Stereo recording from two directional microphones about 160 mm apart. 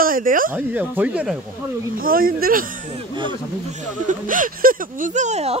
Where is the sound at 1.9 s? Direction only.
65° right (ahead or behind); by 5.5 s 45° right (ahead or behind).